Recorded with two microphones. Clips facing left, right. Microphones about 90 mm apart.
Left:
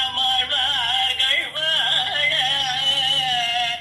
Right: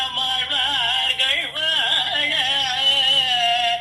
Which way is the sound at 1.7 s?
50° right (ahead or behind).